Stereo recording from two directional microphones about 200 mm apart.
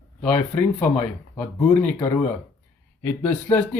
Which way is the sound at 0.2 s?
5° left (ahead or behind).